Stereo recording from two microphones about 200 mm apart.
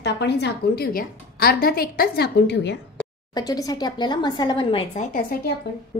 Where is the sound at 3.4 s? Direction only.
20° left (ahead or behind).